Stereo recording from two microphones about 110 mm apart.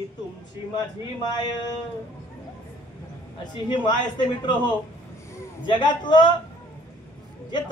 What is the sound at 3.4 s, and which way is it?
Speech, 40° left (ahead or behind).